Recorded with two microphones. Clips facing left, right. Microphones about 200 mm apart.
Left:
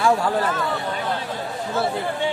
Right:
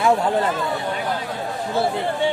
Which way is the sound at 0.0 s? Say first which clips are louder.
Right 1 dB; 20° right (ahead or behind).